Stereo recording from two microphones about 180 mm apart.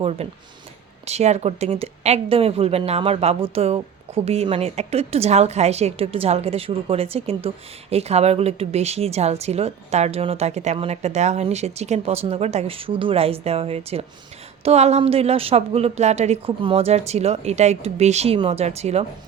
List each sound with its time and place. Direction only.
0.2 s speech: 35° right (ahead or behind)